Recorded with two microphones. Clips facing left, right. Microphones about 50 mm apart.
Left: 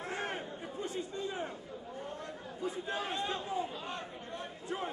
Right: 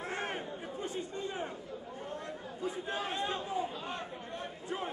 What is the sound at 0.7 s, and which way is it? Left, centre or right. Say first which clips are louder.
Chatter: left 1 dB; right.